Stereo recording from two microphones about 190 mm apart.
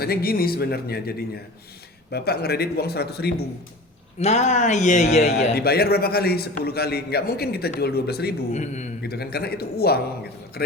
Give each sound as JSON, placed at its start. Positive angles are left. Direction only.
{"t": 0.0, "sound": "a man's voice", "side_deg": 55}
{"t": 4.2, "sound": "a man's voice", "side_deg": 35}
{"t": 5.5, "sound": "a man's voice", "side_deg": 55}
{"t": 8.5, "sound": "a man's voice", "side_deg": 40}
{"t": 9.0, "sound": "a man's voice", "side_deg": 55}